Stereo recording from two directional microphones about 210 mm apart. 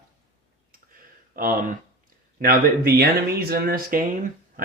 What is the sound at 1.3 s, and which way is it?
Speech, 40° right (ahead or behind).